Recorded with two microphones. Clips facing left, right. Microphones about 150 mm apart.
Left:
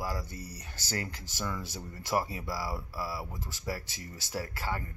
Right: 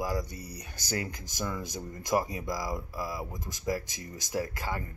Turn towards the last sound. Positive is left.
turn(degrees=-15)  # may be behind; listen again after turning